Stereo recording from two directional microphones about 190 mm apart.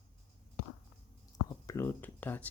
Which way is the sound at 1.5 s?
15° left (ahead or behind).